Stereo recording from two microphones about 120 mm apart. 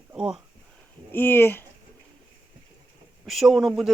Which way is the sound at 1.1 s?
15° left (ahead or behind).